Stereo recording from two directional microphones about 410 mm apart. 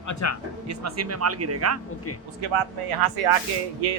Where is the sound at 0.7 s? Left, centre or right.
Right.